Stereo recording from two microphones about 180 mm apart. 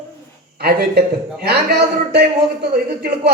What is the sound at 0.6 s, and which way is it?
A woman's voice, 60° right (ahead or behind).